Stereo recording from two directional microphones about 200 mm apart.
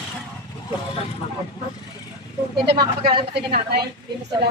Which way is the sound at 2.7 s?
25° right (ahead or behind).